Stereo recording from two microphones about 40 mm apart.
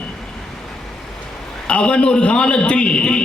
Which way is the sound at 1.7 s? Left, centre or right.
Left.